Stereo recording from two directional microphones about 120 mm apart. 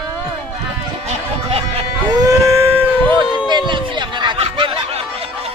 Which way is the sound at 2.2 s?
30° right (ahead or behind).